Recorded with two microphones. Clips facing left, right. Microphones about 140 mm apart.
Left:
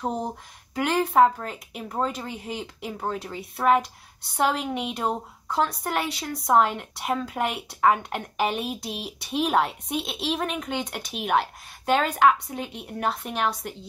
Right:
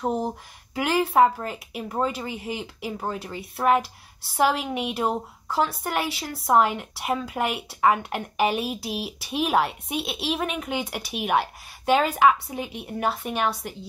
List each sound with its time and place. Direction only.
0.0 s speech: 5° right (ahead or behind)